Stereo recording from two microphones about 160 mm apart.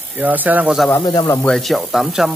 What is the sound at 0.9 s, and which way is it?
Speech, 25° left (ahead or behind).